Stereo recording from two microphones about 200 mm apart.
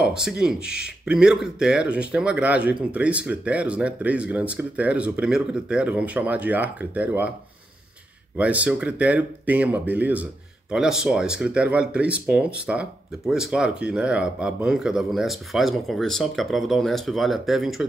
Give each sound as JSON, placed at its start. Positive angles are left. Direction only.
{"t": 0.0, "sound": "speech", "side_deg": -5}
{"t": 8.4, "sound": "speech", "side_deg": -5}